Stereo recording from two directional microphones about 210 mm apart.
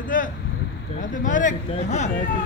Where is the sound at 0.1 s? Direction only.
40° left (ahead or behind).